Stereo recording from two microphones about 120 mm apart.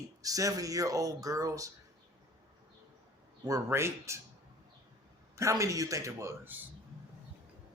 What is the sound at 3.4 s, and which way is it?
Speech, 25° right (ahead or behind).